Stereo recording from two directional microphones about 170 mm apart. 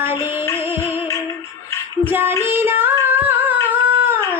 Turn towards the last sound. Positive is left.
turn(degrees=-10)  # may be behind; listen again after turning